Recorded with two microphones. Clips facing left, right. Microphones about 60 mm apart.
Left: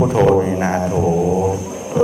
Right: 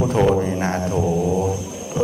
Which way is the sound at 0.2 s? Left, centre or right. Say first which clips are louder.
Left 4 dB; centre.